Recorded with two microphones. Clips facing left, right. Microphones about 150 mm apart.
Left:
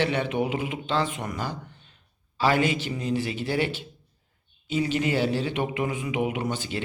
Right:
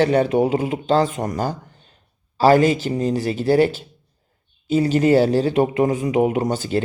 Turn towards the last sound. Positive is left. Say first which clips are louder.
# right 9 dB
turn(degrees=-40)  # may be behind; listen again after turning